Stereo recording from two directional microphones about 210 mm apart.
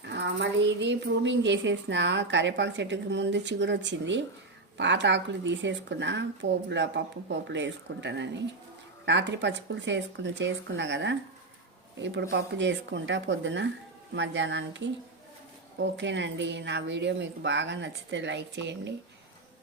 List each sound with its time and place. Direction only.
0.1 s a woman's voice: 55° right (ahead or behind)